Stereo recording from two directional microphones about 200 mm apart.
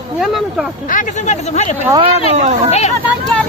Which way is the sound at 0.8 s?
40° left (ahead or behind).